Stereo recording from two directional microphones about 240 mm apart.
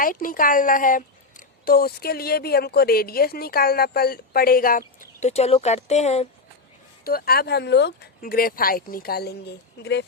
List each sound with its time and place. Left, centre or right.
0.0 s a woman's voice: left
7.0 s a woman's voice: left